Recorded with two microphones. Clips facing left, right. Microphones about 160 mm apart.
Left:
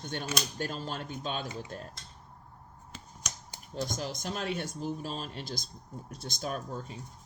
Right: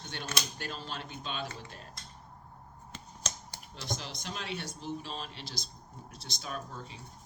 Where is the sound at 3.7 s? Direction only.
45° left (ahead or behind).